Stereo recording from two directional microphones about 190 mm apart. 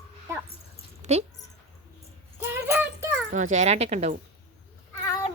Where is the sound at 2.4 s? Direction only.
10° right (ahead or behind).